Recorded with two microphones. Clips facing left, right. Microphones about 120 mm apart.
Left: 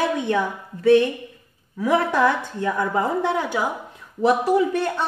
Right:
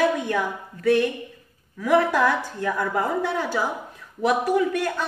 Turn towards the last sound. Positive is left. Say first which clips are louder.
# left 2 dB
turn(degrees=30)  # may be behind; listen again after turning